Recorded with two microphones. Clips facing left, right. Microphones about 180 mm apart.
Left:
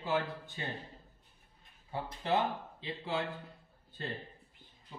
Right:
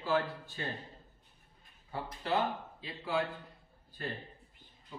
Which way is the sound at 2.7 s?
25° left (ahead or behind).